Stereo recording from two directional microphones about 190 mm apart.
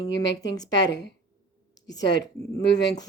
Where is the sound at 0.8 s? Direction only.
65° left (ahead or behind).